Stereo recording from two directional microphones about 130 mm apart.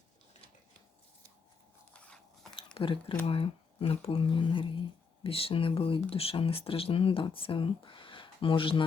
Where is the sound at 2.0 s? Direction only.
10° left (ahead or behind).